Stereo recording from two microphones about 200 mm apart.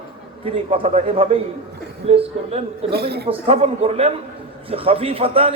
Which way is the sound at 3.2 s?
30° right (ahead or behind).